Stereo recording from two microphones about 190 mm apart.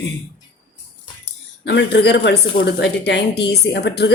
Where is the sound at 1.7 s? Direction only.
65° left (ahead or behind).